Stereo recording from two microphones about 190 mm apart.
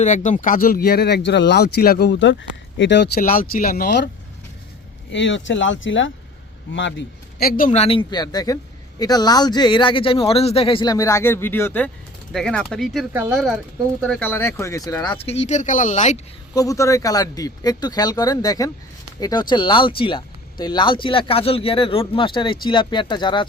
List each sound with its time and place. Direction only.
0.0 s speech: 40° left (ahead or behind); by 3.1 s 70° left (ahead or behind)
3.2 s speech: 45° left (ahead or behind)
5.1 s speech: 75° left (ahead or behind); by 7.7 s 50° left (ahead or behind)
7.7 s a man's voice: 30° left (ahead or behind)
16.6 s a man's voice: 15° left (ahead or behind)